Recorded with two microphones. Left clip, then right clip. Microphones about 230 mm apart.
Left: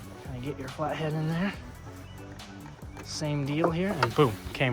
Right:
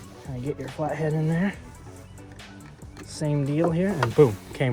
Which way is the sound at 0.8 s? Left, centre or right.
Right.